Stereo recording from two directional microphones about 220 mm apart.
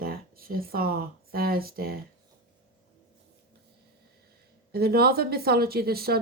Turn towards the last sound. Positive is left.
turn(degrees=-45)  # may be behind; listen again after turning